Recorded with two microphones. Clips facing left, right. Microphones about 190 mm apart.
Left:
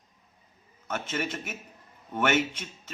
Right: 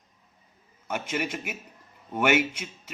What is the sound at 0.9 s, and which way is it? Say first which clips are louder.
A man's voice: right 2 dB; 10° right (ahead or behind).